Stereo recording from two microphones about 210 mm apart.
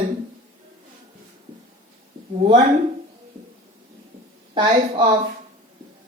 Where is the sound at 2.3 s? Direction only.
20° right (ahead or behind).